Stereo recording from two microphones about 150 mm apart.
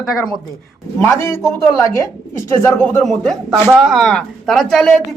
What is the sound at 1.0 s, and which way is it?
Speech, 15° left (ahead or behind).